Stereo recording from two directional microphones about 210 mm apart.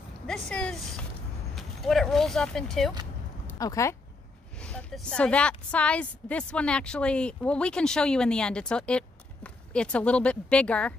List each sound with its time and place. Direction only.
0.3 s a woman's voice: 5° left (ahead or behind)
3.4 s a sound: 15° left (ahead or behind)
4.6 s a woman's voice: 5° left (ahead or behind)